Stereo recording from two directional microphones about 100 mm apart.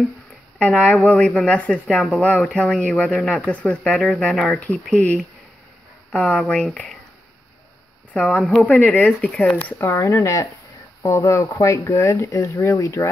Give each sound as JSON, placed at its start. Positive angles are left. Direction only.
{"t": 0.6, "sound": "speech", "side_deg": 15}
{"t": 6.1, "sound": "speech", "side_deg": 5}
{"t": 8.1, "sound": "speech", "side_deg": 10}
{"t": 9.8, "sound": "speech", "side_deg": 25}